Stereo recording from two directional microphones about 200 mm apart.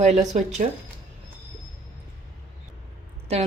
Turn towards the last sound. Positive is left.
turn(degrees=-30)  # may be behind; listen again after turning